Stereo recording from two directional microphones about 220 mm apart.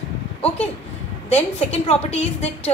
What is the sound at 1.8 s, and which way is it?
Speech, 25° left (ahead or behind).